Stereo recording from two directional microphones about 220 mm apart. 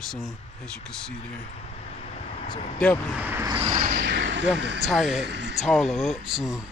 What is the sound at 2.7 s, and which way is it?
Speech, 5° left (ahead or behind).